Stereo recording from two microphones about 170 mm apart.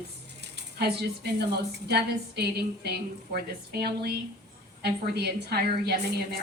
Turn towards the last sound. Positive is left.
turn(degrees=-70)  # may be behind; listen again after turning